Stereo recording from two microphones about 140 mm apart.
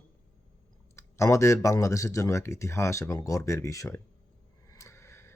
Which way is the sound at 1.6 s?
20° left (ahead or behind).